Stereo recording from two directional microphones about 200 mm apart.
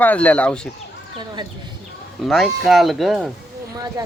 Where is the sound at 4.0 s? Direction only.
20° right (ahead or behind).